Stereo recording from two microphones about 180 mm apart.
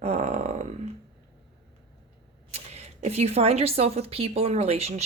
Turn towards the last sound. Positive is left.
turn(degrees=-35)  # may be behind; listen again after turning